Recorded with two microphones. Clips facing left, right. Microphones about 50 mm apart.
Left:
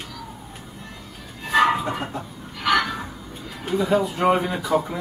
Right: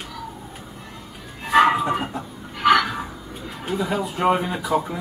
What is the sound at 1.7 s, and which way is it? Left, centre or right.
Chicken, centre.